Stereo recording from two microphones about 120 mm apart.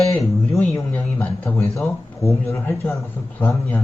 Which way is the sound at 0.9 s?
10° left (ahead or behind).